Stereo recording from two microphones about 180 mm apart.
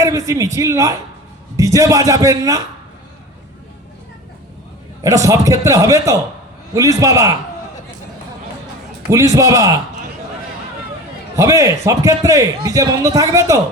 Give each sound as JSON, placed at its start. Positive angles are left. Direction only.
{"t": 0.0, "sound": "a man's voice", "side_deg": -20}
{"t": 5.0, "sound": "a man's voice", "side_deg": -20}
{"t": 9.0, "sound": "a man's voice", "side_deg": -15}
{"t": 11.3, "sound": "a man's voice", "side_deg": -15}